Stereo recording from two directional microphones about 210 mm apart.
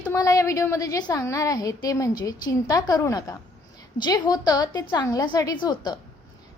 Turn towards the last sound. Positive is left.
turn(degrees=20)  # may be behind; listen again after turning